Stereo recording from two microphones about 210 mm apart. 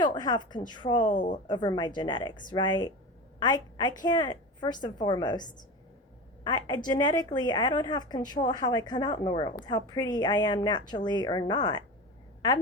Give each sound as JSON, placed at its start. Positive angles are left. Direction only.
{"t": 0.0, "sound": "a woman's voice", "side_deg": 20}
{"t": 0.9, "sound": "a woman's voice", "side_deg": 40}
{"t": 1.5, "sound": "a woman's voice", "side_deg": 20}